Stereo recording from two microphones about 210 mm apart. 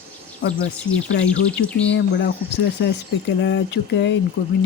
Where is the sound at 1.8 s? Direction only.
55° left (ahead or behind).